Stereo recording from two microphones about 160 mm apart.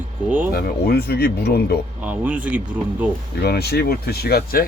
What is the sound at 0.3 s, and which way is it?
Speech, 10° right (ahead or behind).